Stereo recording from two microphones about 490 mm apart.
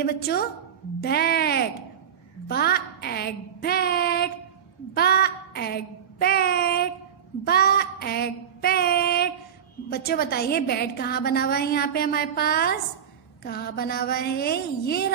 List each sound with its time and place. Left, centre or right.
0.0 s a woman's voice: centre